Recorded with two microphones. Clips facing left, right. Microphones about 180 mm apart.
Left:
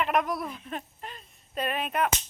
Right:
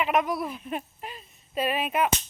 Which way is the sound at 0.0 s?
Centre (ahead or behind).